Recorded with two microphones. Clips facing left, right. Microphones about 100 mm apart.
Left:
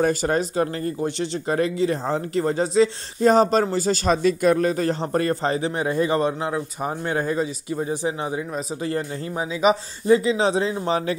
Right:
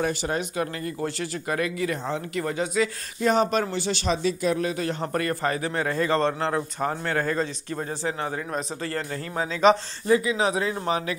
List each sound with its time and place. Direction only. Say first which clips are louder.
0.0 s speech: left 6 dB; 45° left (ahead or behind)
5.1 s speech: left 3 dB; 25° left (ahead or behind); by 9.8 s 10° left (ahead or behind)
10.0 s speech: left 4 dB; 25° left (ahead or behind)